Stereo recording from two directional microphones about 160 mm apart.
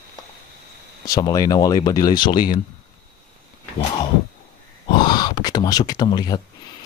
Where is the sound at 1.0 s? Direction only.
20° left (ahead or behind).